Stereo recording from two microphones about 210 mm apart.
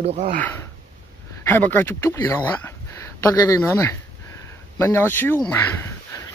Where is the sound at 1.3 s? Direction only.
10° left (ahead or behind).